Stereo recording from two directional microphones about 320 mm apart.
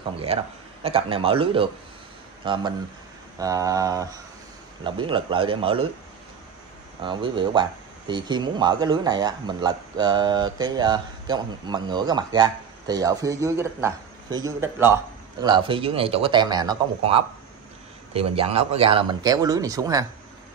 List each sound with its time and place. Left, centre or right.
0.3 s a man's voice: centre
7.0 s speech: centre